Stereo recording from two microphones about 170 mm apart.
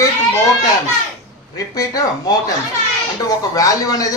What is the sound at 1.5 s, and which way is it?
Speech, 20° left (ahead or behind).